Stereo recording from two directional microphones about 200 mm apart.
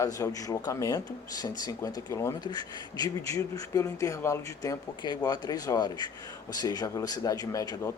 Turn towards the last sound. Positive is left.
turn(degrees=15)  # may be behind; listen again after turning